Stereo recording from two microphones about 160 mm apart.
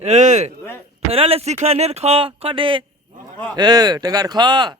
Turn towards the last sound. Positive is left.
turn(degrees=-25)  # may be behind; listen again after turning